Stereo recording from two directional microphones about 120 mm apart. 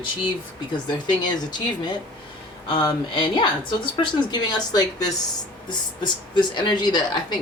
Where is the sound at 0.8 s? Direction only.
35° left (ahead or behind).